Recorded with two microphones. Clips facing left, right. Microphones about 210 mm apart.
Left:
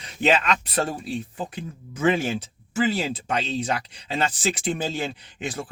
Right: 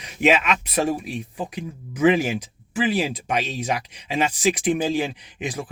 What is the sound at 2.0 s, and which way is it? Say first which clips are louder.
Speech: right 4 dB; 15° right (ahead or behind).